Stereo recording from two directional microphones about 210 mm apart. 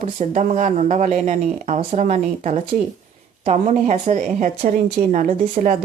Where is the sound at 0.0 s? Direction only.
35° right (ahead or behind).